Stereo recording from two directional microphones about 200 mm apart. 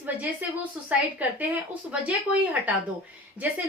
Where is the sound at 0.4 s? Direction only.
10° right (ahead or behind).